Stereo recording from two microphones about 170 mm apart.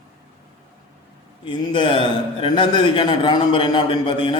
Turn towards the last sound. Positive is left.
turn(degrees=30)  # may be behind; listen again after turning